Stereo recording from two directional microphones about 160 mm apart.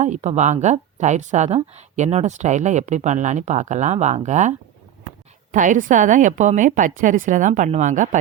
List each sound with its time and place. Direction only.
0.0 s a woman's voice: 45° right (ahead or behind)